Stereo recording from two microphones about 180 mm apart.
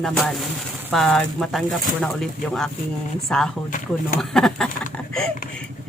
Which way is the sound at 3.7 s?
50° left (ahead or behind).